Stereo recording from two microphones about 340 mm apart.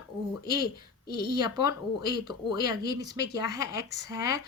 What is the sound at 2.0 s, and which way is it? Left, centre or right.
A woman's voice, left.